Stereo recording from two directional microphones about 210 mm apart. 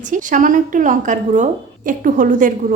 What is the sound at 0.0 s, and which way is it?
A woman's voice, 40° right (ahead or behind).